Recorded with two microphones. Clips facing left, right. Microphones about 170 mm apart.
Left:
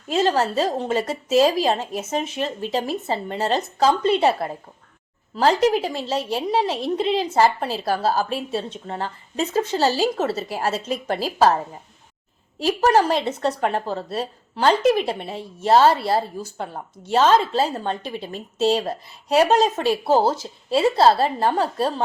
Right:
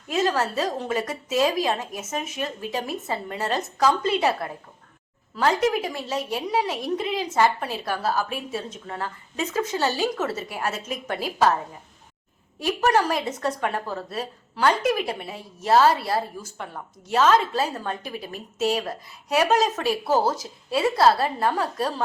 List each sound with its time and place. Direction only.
0.1 s speech: 30° left (ahead or behind)
5.6 s a woman's voice: 30° left (ahead or behind)
12.5 s speech: 30° left (ahead or behind)